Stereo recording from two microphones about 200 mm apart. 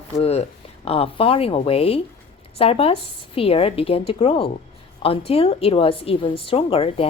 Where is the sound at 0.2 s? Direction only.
30° left (ahead or behind).